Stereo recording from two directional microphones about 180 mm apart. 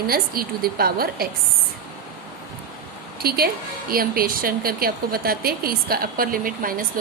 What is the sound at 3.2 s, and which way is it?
A woman's voice, 55° right (ahead or behind).